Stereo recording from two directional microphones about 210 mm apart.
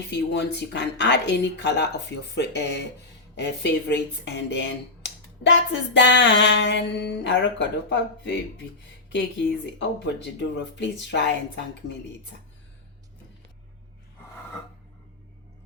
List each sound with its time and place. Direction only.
0.1 s speech: 50° left (ahead or behind)
9.7 s speech: 55° left (ahead or behind)